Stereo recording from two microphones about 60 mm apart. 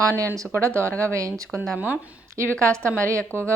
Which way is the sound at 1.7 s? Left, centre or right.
Right.